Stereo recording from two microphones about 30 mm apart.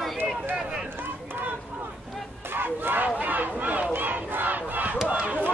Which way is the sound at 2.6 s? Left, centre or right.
Right.